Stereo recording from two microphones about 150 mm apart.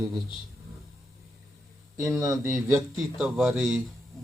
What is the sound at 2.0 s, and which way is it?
Speech, 20° right (ahead or behind).